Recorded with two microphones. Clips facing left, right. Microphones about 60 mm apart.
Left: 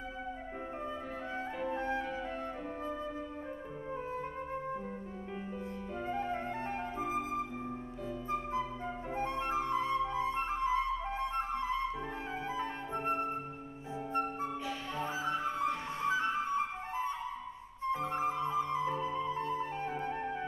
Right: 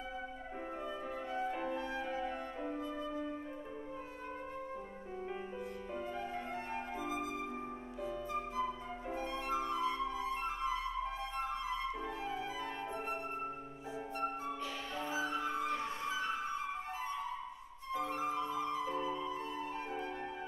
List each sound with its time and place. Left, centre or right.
1.7 s music: left
6.0 s flute: left
9.1 s flute: left
12.5 s flute: left
15.0 s flute: left